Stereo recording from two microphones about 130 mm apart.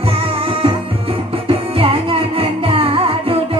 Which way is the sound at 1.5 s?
45° right (ahead or behind).